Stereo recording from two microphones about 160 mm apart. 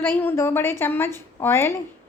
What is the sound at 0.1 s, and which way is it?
A woman's voice, 10° left (ahead or behind).